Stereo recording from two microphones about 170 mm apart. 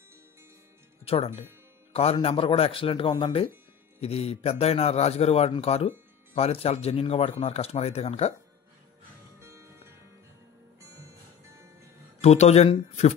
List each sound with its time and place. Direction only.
1.0 s a man's voice: 35° left (ahead or behind)
9.4 s music: 15° right (ahead or behind)
12.2 s a man's voice: 40° left (ahead or behind)